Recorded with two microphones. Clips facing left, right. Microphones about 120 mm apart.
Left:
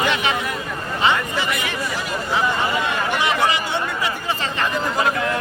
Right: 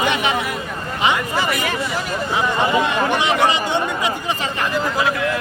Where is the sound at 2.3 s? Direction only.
20° right (ahead or behind).